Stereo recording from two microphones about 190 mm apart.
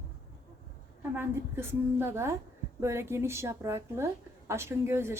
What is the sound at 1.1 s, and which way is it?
A woman's voice, 10° right (ahead or behind).